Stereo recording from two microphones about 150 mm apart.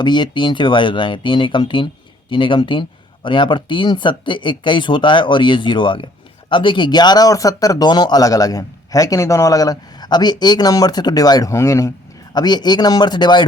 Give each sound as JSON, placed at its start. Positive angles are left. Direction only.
{"t": 0.0, "sound": "speech", "side_deg": 30}